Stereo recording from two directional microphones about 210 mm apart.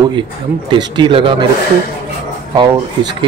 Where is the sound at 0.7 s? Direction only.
20° right (ahead or behind).